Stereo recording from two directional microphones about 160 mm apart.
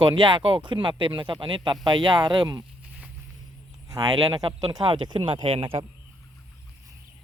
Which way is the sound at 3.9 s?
25° right (ahead or behind).